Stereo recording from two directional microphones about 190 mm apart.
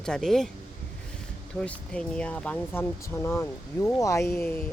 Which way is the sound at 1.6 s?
5° left (ahead or behind).